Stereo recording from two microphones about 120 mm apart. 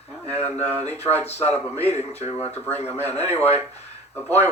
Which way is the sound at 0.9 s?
65° left (ahead or behind).